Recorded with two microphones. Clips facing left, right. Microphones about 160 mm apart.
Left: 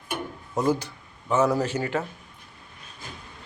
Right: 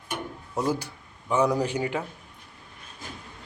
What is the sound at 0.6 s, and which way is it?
Speech, 10° right (ahead or behind).